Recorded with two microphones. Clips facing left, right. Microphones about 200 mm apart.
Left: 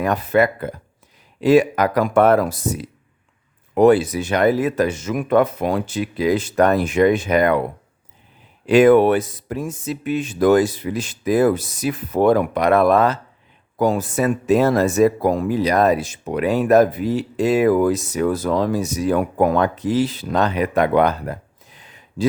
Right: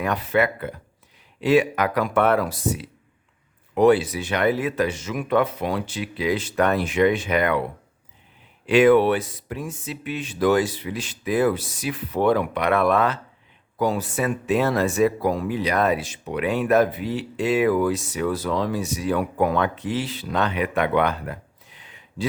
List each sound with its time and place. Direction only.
0.0 s speech: 45° left (ahead or behind)
8.6 s speech: 40° left (ahead or behind)